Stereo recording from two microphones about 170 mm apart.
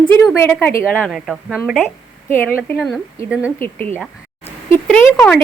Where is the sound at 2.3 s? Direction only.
15° left (ahead or behind).